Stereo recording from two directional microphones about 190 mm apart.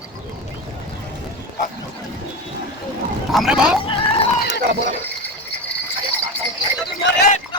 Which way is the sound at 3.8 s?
30° left (ahead or behind).